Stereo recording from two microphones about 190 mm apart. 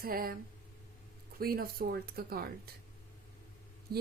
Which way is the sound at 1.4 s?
50° right (ahead or behind).